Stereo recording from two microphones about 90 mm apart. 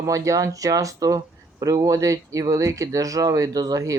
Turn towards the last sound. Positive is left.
turn(degrees=-40)  # may be behind; listen again after turning